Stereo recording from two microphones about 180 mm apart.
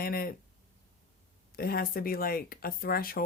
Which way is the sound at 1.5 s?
55° left (ahead or behind).